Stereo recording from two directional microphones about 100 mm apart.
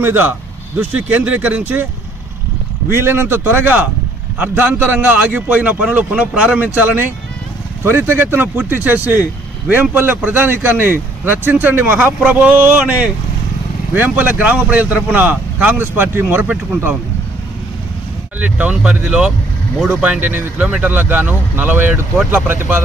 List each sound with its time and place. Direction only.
0.0 s a man's voice: 20° right (ahead or behind)
2.9 s a man's voice: 25° right (ahead or behind)
18.3 s a man's voice: 15° right (ahead or behind)